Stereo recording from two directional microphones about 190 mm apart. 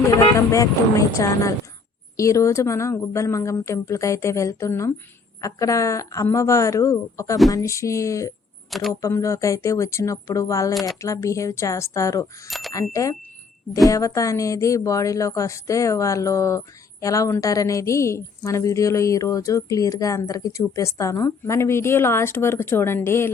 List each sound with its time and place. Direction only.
0.2 s a woman's voice: 15° left (ahead or behind)
8.7 s speech: centre (ahead or behind)
9.0 s a woman's voice: 15° left (ahead or behind)
12.5 s speech: centre (ahead or behind)
12.9 s a woman's voice: 15° left (ahead or behind)